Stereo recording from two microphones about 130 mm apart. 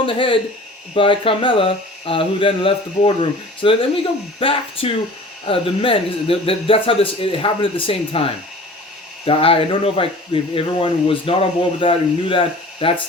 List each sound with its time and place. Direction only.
0.0 s speech: 40° left (ahead or behind)